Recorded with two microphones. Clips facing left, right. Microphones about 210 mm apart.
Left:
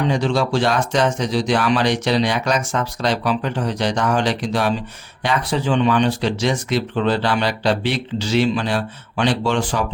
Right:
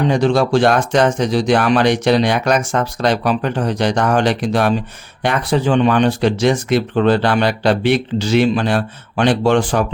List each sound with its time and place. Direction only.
0.1 s speech: 55° right (ahead or behind)